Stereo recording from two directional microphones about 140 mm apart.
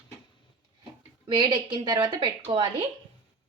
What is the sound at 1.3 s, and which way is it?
Speech, 30° right (ahead or behind).